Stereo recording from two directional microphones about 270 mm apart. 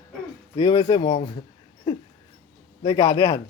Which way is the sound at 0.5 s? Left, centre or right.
Centre.